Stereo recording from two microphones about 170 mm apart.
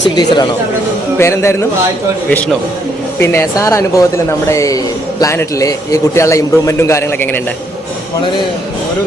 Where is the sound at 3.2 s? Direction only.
15° left (ahead or behind).